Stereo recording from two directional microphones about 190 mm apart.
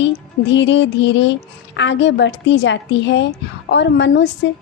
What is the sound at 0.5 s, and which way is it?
Speech, 70° left (ahead or behind).